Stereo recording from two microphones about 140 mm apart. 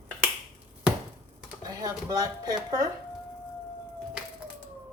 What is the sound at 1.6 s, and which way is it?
Speech, 25° right (ahead or behind).